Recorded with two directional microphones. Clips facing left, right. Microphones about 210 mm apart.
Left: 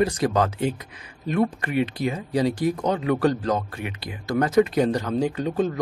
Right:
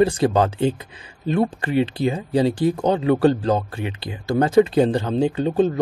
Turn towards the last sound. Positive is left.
turn(degrees=-30)  # may be behind; listen again after turning